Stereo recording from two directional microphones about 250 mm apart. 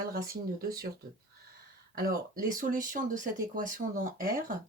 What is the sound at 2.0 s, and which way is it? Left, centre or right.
Speech, right.